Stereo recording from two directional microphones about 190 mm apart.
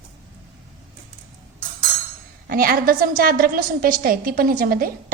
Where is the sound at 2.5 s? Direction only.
50° right (ahead or behind).